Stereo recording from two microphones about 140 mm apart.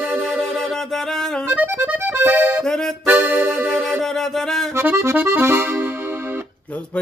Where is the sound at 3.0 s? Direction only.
10° right (ahead or behind).